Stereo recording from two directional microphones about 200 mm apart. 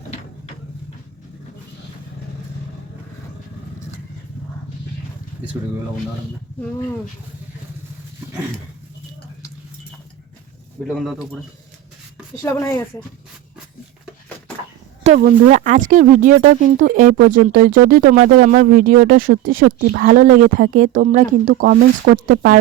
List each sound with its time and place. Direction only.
10.8 s speech: centre (ahead or behind)
12.4 s speech: 15° left (ahead or behind)
15.2 s speech: 40° right (ahead or behind)